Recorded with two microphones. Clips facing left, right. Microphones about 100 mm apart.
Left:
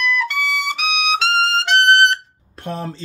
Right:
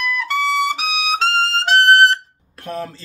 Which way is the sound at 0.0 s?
40° right (ahead or behind).